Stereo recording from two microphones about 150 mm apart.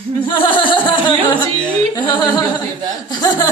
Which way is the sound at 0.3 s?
35° left (ahead or behind).